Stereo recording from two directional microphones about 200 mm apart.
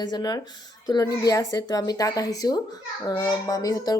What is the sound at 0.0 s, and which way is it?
Speech, 20° left (ahead or behind).